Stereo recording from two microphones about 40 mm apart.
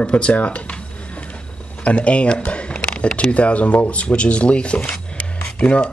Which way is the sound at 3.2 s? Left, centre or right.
Left.